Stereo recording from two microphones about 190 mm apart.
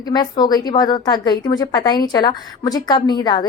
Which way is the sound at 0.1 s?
20° left (ahead or behind).